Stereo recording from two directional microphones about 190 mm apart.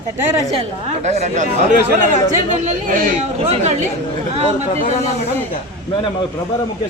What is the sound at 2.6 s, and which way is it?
A man's voice, 35° right (ahead or behind).